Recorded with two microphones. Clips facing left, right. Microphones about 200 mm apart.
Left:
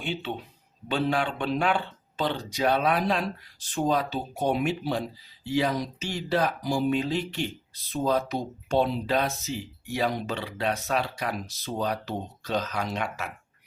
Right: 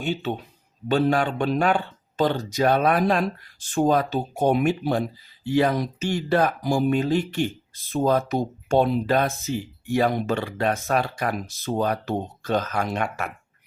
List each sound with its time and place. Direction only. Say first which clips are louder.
0.0 s speech: right 5 dB; 45° right (ahead or behind)